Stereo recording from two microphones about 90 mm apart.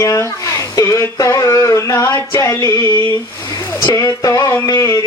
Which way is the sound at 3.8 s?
40° left (ahead or behind).